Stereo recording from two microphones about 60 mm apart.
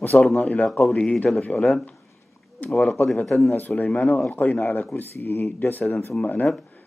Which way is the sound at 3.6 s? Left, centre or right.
Left.